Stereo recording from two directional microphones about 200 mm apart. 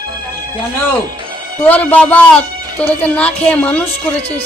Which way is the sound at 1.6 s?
10° left (ahead or behind).